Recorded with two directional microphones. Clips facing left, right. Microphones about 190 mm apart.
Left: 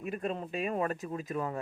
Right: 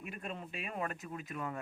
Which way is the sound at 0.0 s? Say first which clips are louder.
Left 9 dB; 35° left (ahead or behind).